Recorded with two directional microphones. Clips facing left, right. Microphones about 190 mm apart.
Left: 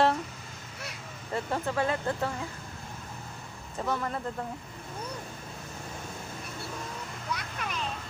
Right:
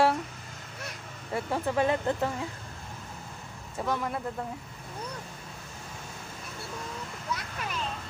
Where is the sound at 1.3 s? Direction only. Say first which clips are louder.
Right 2 dB; 15° right (ahead or behind).